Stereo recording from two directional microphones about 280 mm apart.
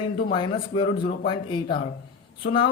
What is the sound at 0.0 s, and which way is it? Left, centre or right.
A man's voice, centre.